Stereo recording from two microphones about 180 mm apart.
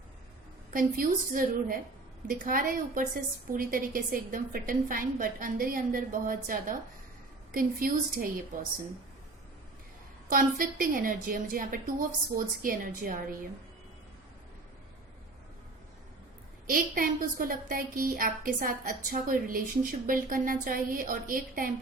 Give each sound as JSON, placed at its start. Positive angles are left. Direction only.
{"t": 0.7, "sound": "a woman's voice", "side_deg": -50}
{"t": 10.2, "sound": "a woman's voice", "side_deg": -50}
{"t": 16.6, "sound": "a woman's voice", "side_deg": -50}